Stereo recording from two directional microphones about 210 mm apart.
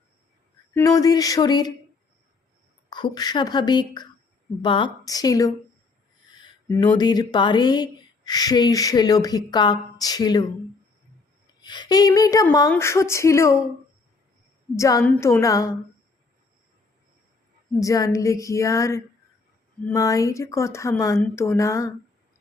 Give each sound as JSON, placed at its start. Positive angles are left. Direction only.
{"t": 0.7, "sound": "speech", "side_deg": 15}
{"t": 2.9, "sound": "speech", "side_deg": 20}
{"t": 6.7, "sound": "speech", "side_deg": 20}
{"t": 11.6, "sound": "speech", "side_deg": 20}
{"t": 14.8, "sound": "speech", "side_deg": 15}
{"t": 17.7, "sound": "speech", "side_deg": 15}